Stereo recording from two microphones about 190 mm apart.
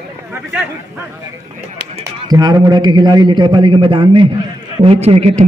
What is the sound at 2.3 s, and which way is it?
A man's voice, 20° right (ahead or behind).